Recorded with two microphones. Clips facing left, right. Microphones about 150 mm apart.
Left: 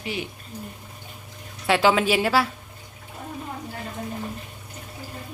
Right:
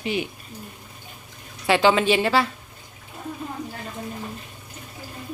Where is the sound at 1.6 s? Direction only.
Centre (ahead or behind).